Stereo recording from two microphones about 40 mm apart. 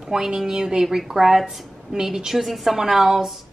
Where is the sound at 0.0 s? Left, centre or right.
Centre.